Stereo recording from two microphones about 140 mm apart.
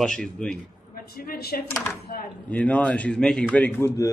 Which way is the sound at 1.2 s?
90° left.